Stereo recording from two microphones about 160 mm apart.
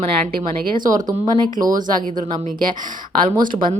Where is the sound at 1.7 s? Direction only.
55° right (ahead or behind).